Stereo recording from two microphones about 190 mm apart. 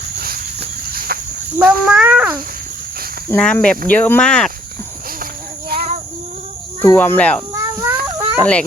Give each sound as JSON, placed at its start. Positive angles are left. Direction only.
{"t": 0.9, "sound": "a sound", "side_deg": -50}
{"t": 1.5, "sound": "a sound", "side_deg": -5}
{"t": 3.2, "sound": "speech", "side_deg": 5}
{"t": 5.2, "sound": "child singing", "side_deg": -50}
{"t": 6.8, "sound": "speech", "side_deg": 10}
{"t": 7.5, "sound": "snake", "side_deg": -15}
{"t": 8.4, "sound": "speech", "side_deg": 5}